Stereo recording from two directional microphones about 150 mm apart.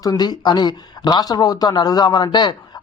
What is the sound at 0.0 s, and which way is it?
Speech, 25° left (ahead or behind).